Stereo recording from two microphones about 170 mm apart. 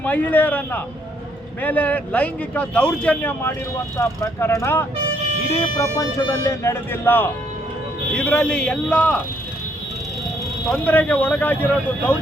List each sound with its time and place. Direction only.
0.0 s a man's voice: 10° left (ahead or behind)
10.7 s a man's voice: 10° left (ahead or behind)